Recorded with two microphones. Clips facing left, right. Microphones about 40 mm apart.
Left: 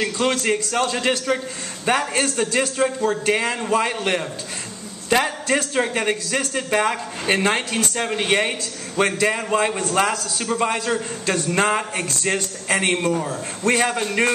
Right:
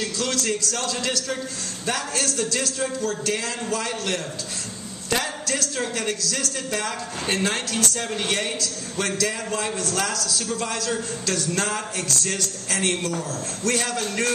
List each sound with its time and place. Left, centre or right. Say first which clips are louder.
0.0 s a man's voice: left 5 dB; left